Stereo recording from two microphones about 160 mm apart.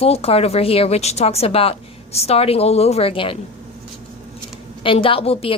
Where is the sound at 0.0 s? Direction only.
40° left (ahead or behind).